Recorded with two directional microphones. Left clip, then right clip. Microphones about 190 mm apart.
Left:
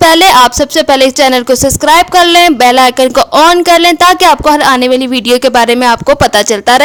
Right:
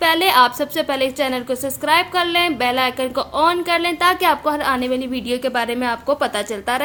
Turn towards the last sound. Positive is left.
turn(degrees=45)  # may be behind; listen again after turning